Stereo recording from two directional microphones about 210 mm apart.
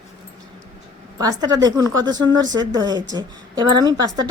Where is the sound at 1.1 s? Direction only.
20° right (ahead or behind).